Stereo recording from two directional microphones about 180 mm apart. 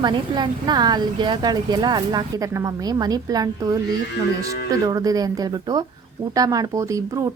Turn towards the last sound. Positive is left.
turn(degrees=-20)  # may be behind; listen again after turning